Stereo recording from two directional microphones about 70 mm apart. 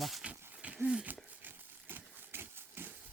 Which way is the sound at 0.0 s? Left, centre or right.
Centre.